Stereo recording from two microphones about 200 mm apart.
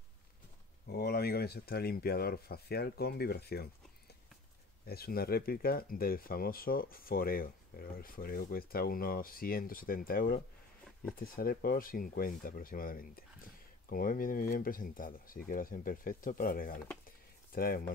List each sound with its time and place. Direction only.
0.8 s speech: 50° left (ahead or behind)
4.8 s speech: 50° left (ahead or behind)